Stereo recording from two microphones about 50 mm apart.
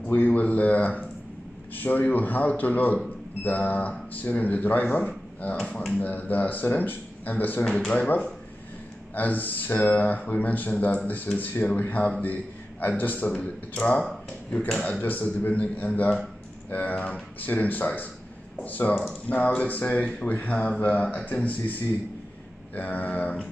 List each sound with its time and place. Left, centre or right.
0.0 s a man's voice: left
7.9 s a man's voice: left
13.3 s a man's voice: left
15.0 s a man's voice: left
22.8 s a man's voice: left